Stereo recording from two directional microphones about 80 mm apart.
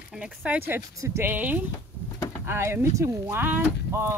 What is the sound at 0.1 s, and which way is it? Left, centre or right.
Speech, centre.